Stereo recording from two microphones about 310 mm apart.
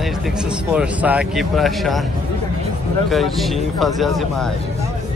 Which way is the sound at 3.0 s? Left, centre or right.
Centre.